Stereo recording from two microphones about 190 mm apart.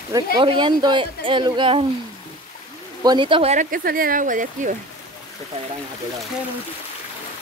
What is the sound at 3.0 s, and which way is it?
Speech, 25° right (ahead or behind).